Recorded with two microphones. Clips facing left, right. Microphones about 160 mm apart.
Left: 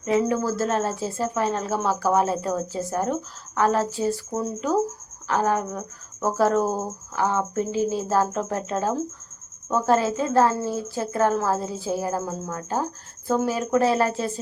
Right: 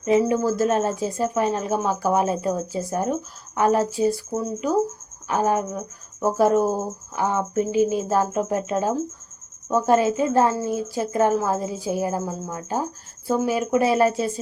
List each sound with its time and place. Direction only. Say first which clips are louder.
0.0 s speech: right 3 dB; 20° right (ahead or behind)